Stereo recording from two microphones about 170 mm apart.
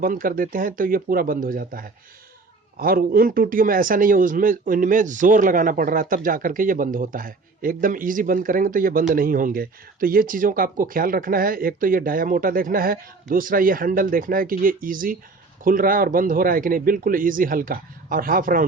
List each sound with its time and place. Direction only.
0.0 s speech: 55° right (ahead or behind)